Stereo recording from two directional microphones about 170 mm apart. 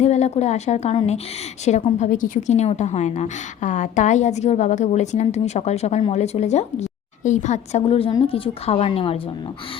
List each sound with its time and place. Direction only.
0.0 s a woman's voice: 40° left (ahead or behind)